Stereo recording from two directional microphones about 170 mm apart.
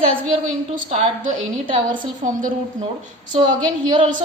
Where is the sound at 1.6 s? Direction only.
30° right (ahead or behind).